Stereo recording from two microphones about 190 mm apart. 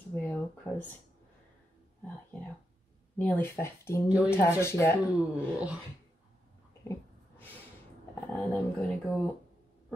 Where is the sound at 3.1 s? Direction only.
10° left (ahead or behind).